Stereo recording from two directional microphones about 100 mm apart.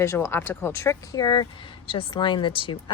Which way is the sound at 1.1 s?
45° left (ahead or behind).